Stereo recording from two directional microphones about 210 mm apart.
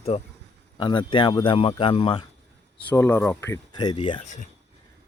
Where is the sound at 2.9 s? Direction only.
10° left (ahead or behind).